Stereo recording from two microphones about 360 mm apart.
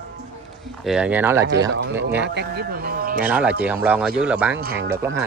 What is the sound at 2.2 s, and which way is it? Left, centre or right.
Speech, right.